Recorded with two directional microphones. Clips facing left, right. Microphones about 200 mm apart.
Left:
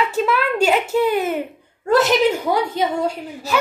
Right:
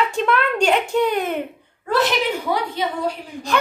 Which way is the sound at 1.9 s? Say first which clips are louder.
Left 5 dB; 45° left (ahead or behind).